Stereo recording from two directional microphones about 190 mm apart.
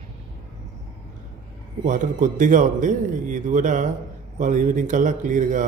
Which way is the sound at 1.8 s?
40° right (ahead or behind).